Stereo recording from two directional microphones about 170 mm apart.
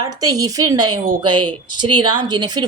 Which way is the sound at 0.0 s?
20° right (ahead or behind).